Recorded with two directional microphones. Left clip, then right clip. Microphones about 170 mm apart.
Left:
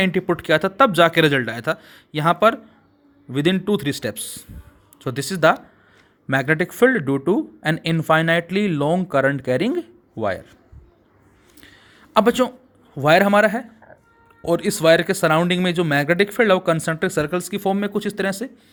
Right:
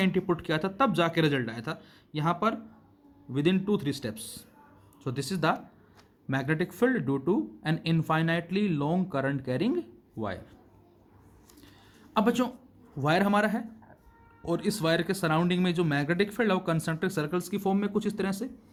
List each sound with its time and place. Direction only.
0.0 s speech: 35° left (ahead or behind)
12.1 s speech: 35° left (ahead or behind)